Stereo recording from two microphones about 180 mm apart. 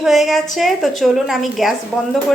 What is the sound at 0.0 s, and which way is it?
A woman's voice, centre (ahead or behind).